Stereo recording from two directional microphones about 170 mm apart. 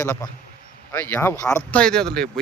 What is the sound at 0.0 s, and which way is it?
Speech, 15° left (ahead or behind).